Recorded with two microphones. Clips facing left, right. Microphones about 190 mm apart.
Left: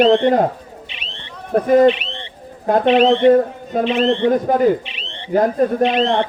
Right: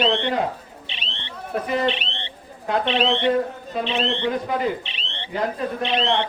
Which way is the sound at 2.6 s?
45° left (ahead or behind).